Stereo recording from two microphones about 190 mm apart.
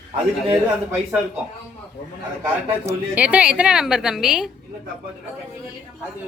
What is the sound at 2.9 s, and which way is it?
A woman's voice, 10° right (ahead or behind).